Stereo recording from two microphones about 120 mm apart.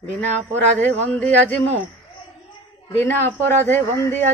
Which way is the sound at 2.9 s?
15° left (ahead or behind).